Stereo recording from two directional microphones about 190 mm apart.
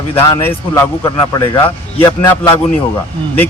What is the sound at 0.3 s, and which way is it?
A man's voice, 20° left (ahead or behind).